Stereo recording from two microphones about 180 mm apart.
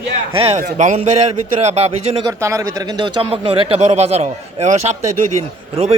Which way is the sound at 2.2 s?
15° right (ahead or behind).